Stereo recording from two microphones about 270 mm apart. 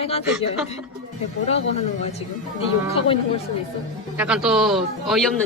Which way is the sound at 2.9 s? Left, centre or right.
Left.